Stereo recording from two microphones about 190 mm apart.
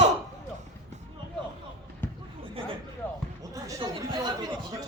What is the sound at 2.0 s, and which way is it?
Basketball bounce, 10° left (ahead or behind).